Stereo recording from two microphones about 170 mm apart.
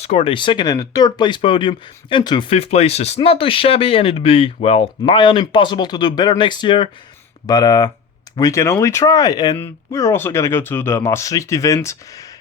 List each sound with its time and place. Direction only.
0.0 s speech: 35° left (ahead or behind); by 12.3 s 20° left (ahead or behind)